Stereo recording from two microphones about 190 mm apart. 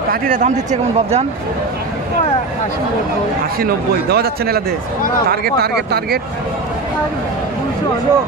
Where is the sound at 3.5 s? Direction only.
55° right (ahead or behind).